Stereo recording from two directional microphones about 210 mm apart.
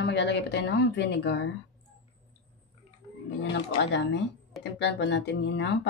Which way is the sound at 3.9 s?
55° left (ahead or behind).